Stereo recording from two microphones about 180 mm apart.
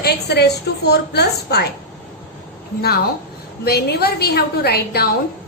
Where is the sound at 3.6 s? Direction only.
60° left (ahead or behind).